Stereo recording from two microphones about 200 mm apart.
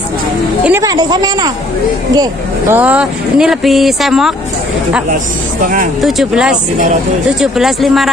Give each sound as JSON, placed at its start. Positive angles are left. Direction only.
{"t": 0.7, "sound": "a woman's voice", "side_deg": -15}
{"t": 2.7, "sound": "speech", "side_deg": -5}
{"t": 6.0, "sound": "speech", "side_deg": 0}